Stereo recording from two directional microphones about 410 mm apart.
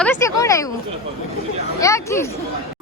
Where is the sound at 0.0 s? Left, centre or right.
Centre.